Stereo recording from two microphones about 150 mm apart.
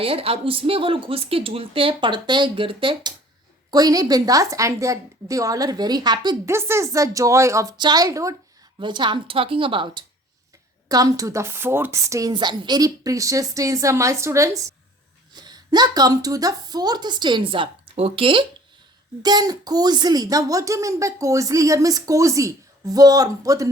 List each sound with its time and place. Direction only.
0.0 s a woman's voice: 40° right (ahead or behind)
3.7 s a woman's voice: 25° right (ahead or behind)
6.5 s a woman's voice: 15° right (ahead or behind)
8.8 s a woman's voice: 30° right (ahead or behind)
19.2 s a woman's voice: 25° right (ahead or behind)